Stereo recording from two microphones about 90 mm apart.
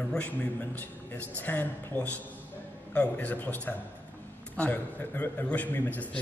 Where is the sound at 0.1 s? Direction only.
15° left (ahead or behind).